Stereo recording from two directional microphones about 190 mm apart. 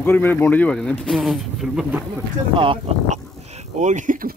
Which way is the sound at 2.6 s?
30° right (ahead or behind).